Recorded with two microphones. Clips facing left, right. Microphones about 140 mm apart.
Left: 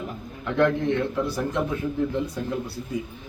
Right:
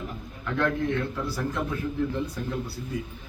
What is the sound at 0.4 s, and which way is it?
A man's voice, 20° left (ahead or behind).